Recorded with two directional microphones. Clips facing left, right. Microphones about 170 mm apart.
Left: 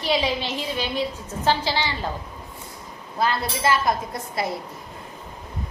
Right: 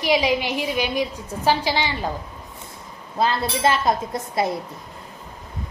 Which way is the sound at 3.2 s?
25° right (ahead or behind).